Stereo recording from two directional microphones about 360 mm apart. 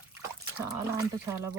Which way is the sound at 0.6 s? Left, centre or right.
Centre.